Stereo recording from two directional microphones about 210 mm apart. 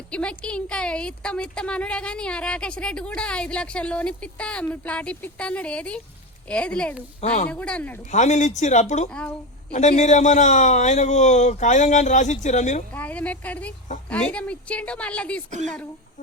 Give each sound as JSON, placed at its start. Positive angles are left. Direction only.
{"t": 0.1, "sound": "a woman's voice", "side_deg": 5}
{"t": 8.1, "sound": "a man's voice", "side_deg": 35}
{"t": 12.9, "sound": "a woman's voice", "side_deg": 5}